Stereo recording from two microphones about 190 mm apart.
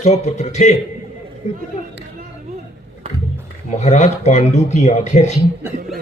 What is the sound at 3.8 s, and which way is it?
A man's voice, 40° left (ahead or behind).